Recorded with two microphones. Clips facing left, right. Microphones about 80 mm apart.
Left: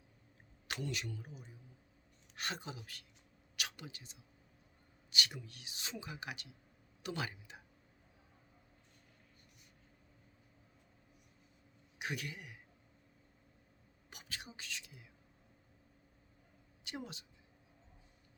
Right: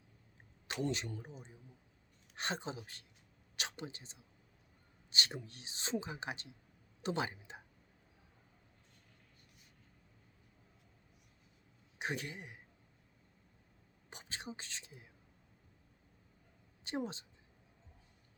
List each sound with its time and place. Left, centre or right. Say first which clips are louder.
0.7 s a woman's voice: right 4 dB; right
11.9 s speech: right 2 dB; right
14.1 s speech: right 4 dB; right
16.8 s a woman's voice: right 7 dB; right